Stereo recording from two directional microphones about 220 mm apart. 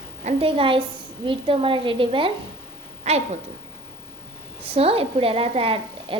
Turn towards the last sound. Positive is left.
turn(degrees=-25)  # may be behind; listen again after turning